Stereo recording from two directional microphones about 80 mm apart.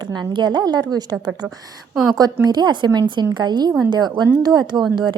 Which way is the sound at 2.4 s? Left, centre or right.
Right.